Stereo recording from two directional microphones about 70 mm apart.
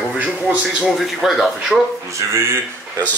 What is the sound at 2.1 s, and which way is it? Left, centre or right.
Speech, right.